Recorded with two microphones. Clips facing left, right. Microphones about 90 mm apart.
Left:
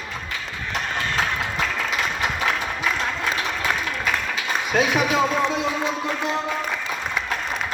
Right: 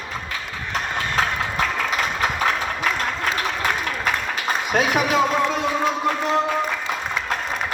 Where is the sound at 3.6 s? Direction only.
45° right (ahead or behind).